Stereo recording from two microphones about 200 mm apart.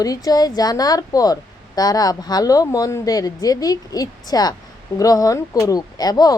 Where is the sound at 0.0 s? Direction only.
20° left (ahead or behind).